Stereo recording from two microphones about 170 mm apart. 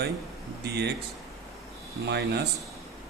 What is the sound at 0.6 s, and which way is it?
Speech, 70° right (ahead or behind).